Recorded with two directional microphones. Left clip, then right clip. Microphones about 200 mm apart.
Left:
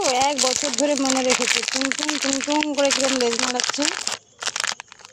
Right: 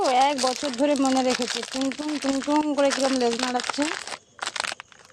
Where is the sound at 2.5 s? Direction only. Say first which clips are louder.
Left 1 dB; 5° left (ahead or behind).